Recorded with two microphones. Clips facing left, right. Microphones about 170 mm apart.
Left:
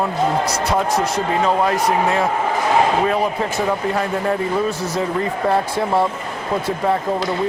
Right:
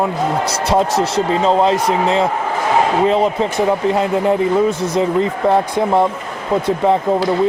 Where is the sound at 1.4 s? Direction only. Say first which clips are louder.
Right 4 dB; 25° right (ahead or behind).